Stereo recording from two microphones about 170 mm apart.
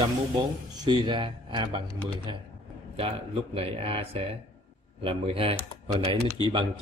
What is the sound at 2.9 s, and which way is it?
Speech, 35° right (ahead or behind).